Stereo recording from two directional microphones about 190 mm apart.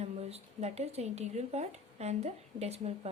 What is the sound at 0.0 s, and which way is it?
Speech, 35° right (ahead or behind).